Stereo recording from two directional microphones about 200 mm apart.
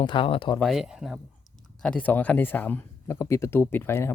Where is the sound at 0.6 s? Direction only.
Centre (ahead or behind).